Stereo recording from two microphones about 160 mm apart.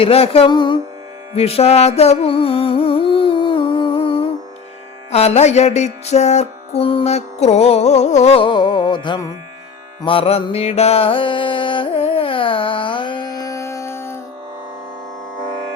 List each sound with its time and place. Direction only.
0.0 s music: 40° left (ahead or behind); by 14.2 s 15° left (ahead or behind)